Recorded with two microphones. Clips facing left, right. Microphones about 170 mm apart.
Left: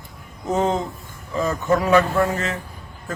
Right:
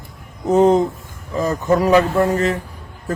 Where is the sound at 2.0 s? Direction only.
40° right (ahead or behind).